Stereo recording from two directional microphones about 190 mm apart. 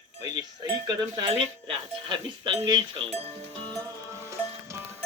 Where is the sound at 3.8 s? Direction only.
15° right (ahead or behind).